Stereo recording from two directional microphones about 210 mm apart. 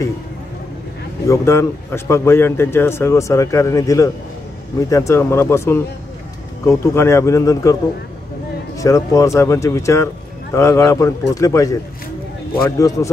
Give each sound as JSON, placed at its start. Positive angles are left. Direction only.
{"t": 1.2, "sound": "a man's voice", "side_deg": 15}
{"t": 8.7, "sound": "a man's voice", "side_deg": 15}